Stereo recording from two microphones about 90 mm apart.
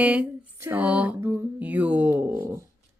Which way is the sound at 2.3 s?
35° right (ahead or behind).